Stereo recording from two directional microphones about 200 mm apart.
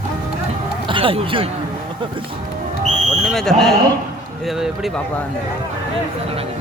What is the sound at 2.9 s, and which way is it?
Speech, centre (ahead or behind).